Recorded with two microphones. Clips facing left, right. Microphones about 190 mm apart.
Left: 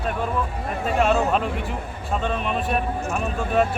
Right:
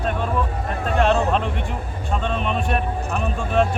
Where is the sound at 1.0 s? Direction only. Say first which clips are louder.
Right 1 dB; 5° left (ahead or behind).